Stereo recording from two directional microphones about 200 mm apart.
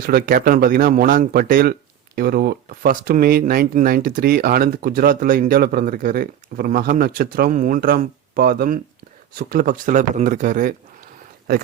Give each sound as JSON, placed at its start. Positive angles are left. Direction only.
{"t": 0.0, "sound": "speech", "side_deg": -50}